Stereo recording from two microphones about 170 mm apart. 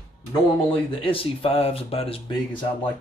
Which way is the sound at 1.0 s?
35° left (ahead or behind).